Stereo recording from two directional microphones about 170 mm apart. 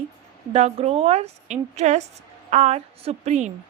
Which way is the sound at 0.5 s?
35° right (ahead or behind).